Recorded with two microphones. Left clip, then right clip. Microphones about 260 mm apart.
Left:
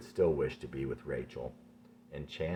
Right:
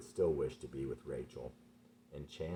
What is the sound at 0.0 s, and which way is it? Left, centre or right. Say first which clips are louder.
Speech: left 4 dB; left.